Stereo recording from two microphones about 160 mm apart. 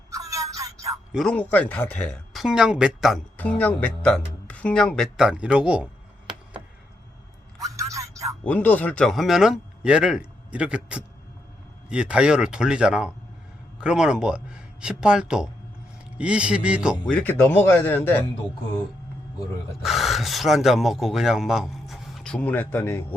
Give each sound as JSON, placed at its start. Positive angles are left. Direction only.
{"t": 0.1, "sound": "music", "side_deg": -20}
{"t": 1.1, "sound": "speech", "side_deg": 5}
{"t": 3.3, "sound": "speech", "side_deg": 10}
{"t": 7.6, "sound": "music", "side_deg": -20}
{"t": 8.4, "sound": "a man's voice", "side_deg": 10}
{"t": 17.1, "sound": "speech", "side_deg": 10}
{"t": 19.8, "sound": "speech", "side_deg": 0}